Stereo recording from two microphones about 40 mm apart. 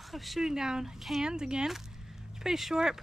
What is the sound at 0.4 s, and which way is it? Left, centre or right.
Speech, centre.